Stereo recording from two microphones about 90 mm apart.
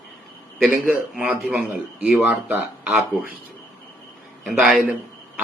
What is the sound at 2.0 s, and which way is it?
Speech, 15° right (ahead or behind).